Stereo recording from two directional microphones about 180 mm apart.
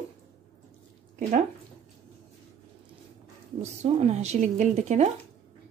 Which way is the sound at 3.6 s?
40° right (ahead or behind).